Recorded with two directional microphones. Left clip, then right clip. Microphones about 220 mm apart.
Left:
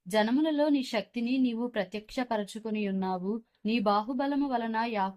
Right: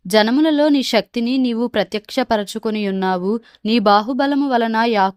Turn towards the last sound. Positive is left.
turn(degrees=-50)  # may be behind; listen again after turning